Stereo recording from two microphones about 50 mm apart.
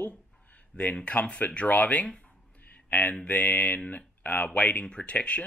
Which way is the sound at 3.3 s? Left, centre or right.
Left.